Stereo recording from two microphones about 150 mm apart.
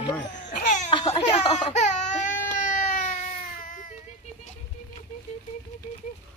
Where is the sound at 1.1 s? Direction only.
45° left (ahead or behind).